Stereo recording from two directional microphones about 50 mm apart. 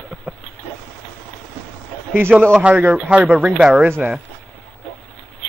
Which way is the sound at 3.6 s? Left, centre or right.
Centre.